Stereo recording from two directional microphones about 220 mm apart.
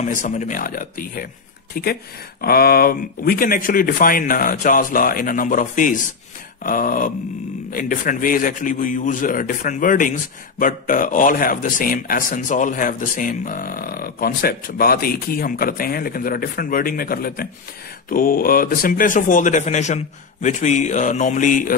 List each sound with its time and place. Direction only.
0.0 s speech: 30° left (ahead or behind)
2.4 s speech: 45° left (ahead or behind)